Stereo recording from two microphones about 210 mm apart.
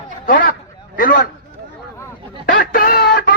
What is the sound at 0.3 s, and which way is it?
Speech, 45° left (ahead or behind).